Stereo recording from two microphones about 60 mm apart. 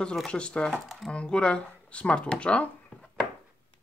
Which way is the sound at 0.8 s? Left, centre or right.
Centre.